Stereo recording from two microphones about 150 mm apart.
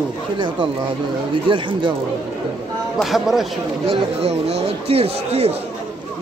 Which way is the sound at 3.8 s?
40° right (ahead or behind).